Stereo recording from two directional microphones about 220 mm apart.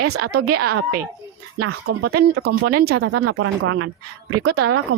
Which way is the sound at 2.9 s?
80° right.